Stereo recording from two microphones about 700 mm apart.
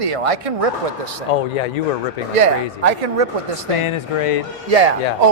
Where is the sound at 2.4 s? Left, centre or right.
Right.